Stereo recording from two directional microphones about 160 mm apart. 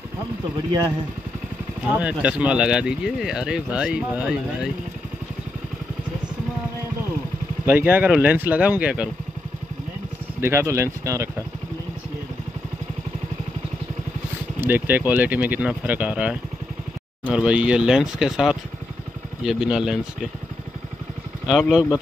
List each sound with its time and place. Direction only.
1.9 s speech: 10° right (ahead or behind)
7.6 s speech: 10° right (ahead or behind)
10.4 s speech: 15° right (ahead or behind)
14.6 s speech: 10° right (ahead or behind)
21.5 s speech: 5° right (ahead or behind)